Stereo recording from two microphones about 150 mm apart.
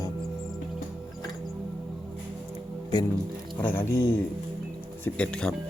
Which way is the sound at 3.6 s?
15° left (ahead or behind).